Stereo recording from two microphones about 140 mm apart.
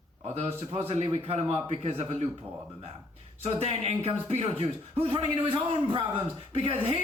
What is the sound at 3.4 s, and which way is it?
Speech, 50° right (ahead or behind).